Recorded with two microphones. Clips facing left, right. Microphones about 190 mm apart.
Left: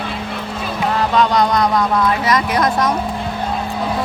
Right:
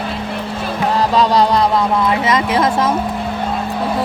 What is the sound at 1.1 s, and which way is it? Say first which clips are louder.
Music: right 1 dB; 35° right (ahead or behind).